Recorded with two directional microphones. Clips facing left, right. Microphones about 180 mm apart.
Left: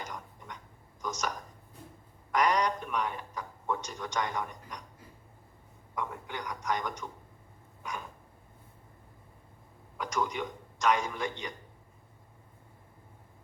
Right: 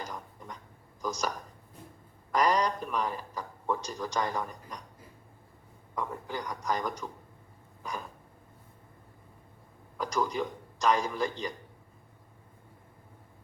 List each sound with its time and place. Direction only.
0.0 s a sound: 35° right (ahead or behind)
1.0 s a man's voice: 35° right (ahead or behind)
2.3 s a man's voice: 35° right (ahead or behind)
6.0 s a man's voice: 35° right (ahead or behind)
10.0 s a man's voice: 35° right (ahead or behind)